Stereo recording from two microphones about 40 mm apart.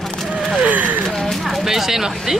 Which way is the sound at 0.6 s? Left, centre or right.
Right.